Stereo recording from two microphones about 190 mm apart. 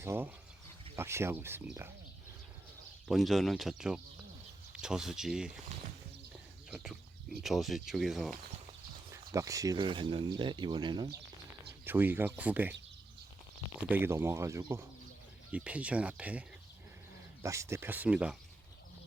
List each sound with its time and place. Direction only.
0.0 s speech: 10° right (ahead or behind)
3.1 s speech: centre (ahead or behind)
6.7 s speech: 5° right (ahead or behind)
9.3 s speech: 15° right (ahead or behind)
11.9 s speech: 10° right (ahead or behind)
13.7 s speech: 10° right (ahead or behind)
17.4 s speech: 15° right (ahead or behind)